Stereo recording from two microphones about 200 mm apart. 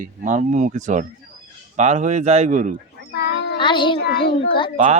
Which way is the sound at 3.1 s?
55° left (ahead or behind).